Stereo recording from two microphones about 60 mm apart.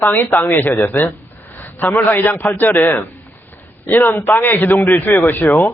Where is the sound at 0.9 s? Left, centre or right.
Left.